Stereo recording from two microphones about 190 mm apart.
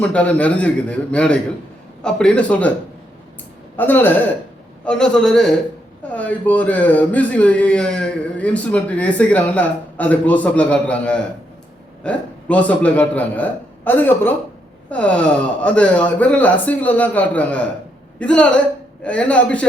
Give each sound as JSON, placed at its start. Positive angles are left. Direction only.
{"t": 0.0, "sound": "a man's voice", "side_deg": 5}
{"t": 3.8, "sound": "a man's voice", "side_deg": 10}